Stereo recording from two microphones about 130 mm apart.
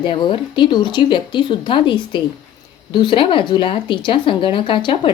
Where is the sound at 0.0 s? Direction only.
40° left (ahead or behind).